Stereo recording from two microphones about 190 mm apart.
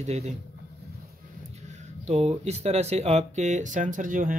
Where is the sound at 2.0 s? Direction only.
35° right (ahead or behind).